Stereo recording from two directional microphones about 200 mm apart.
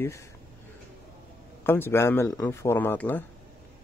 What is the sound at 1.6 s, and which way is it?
Speech, 10° left (ahead or behind).